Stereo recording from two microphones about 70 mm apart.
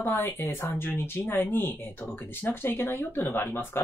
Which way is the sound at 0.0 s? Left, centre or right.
Left.